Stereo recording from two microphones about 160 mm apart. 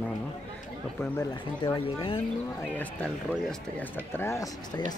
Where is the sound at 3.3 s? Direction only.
5° left (ahead or behind).